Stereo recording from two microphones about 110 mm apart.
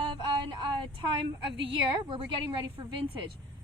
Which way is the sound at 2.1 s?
45° right (ahead or behind).